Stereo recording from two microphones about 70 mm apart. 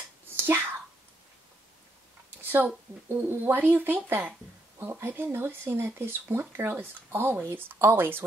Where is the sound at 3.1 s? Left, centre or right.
Right.